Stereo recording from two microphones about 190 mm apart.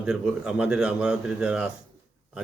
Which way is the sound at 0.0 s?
5° right (ahead or behind).